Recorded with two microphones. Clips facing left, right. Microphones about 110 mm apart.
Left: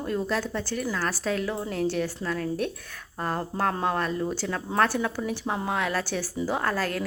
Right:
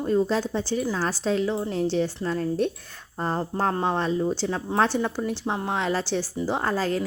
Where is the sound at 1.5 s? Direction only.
Centre (ahead or behind).